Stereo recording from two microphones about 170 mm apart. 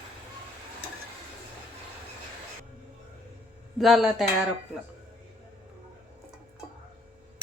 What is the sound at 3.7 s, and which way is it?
Speech, centre (ahead or behind).